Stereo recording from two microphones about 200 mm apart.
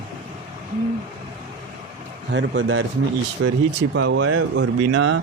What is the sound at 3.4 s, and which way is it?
Speech, 90° right.